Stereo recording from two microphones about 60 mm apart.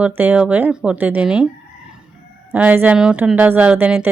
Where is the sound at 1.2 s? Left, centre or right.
Centre.